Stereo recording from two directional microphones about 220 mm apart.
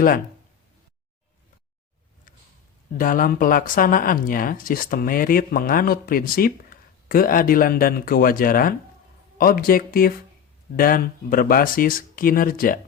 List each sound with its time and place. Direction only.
3.0 s speech: 40° left (ahead or behind)